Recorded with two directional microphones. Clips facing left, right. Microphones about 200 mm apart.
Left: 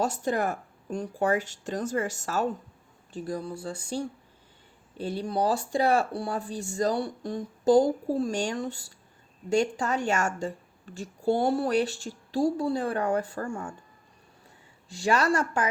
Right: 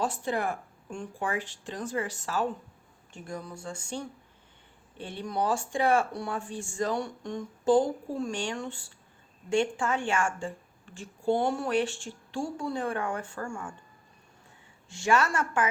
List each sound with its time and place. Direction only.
0.0 s speech: 45° left (ahead or behind)
3.1 s a woman's voice: 35° left (ahead or behind)
14.8 s a woman's voice: 35° left (ahead or behind)